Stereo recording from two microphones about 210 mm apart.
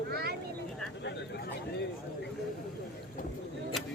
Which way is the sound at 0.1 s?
50° right (ahead or behind).